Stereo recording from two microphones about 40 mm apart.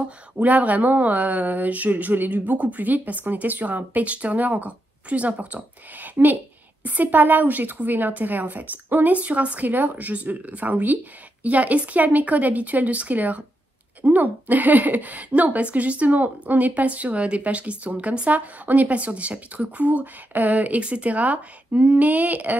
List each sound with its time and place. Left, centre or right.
0.0 s a woman's voice: right